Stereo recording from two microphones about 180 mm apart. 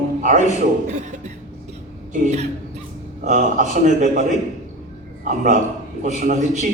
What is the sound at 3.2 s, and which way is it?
A man's voice, 45° right (ahead or behind).